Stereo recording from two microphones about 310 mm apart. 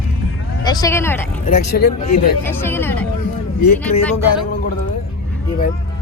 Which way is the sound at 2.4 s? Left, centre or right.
Centre.